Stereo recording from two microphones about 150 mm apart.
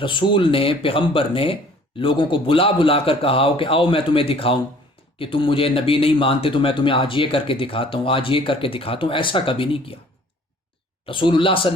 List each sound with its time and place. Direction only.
0.0 s speech: 35° left (ahead or behind)
11.0 s speech: 35° left (ahead or behind)